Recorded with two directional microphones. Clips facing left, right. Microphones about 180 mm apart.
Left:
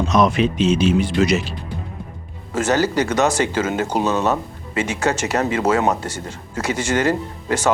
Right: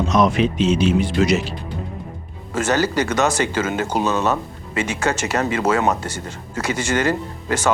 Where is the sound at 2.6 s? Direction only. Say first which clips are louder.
Left 1 dB; 20° left (ahead or behind).